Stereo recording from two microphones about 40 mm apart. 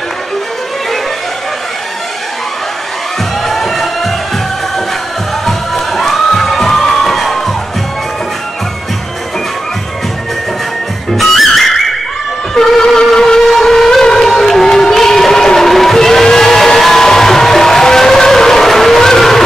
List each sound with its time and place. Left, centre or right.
3.4 s music: centre
5.4 s crowd: centre
11.1 s music: centre
12.5 s vehicle: centre